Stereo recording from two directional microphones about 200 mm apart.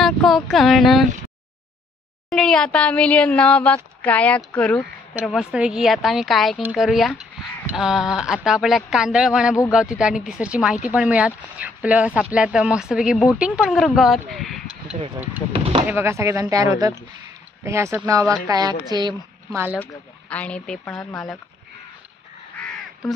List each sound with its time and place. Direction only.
0.0 s speech: centre (ahead or behind)
2.2 s a woman's voice: 5° left (ahead or behind)
15.5 s a woman's voice: 30° right (ahead or behind)
15.9 s a woman's voice: 10° right (ahead or behind)
19.8 s speech: 5° left (ahead or behind)